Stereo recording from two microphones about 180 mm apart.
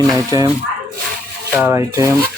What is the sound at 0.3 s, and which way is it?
Speech, 20° right (ahead or behind).